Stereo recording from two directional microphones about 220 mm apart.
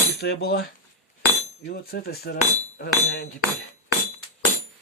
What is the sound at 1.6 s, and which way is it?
Speech, 45° left (ahead or behind).